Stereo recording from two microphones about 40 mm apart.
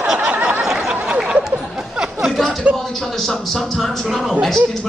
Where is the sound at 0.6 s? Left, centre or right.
Centre.